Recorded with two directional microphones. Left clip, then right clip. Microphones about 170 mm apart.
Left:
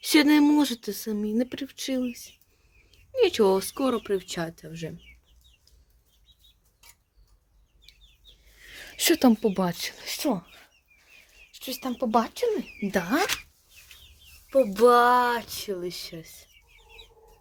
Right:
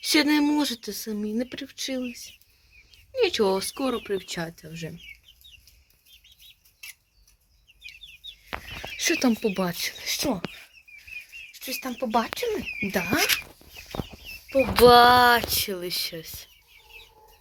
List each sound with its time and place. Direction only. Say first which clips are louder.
0.0 s speech: left 2 dB; 25° left (ahead or behind); by 4.9 s 10° left (ahead or behind)
9.0 s speech: left 2 dB; 25° left (ahead or behind)
9.5 s speech: even; 10° left (ahead or behind)
11.5 s speech: even; 15° left (ahead or behind)
14.5 s speech: right 3 dB; 5° left (ahead or behind)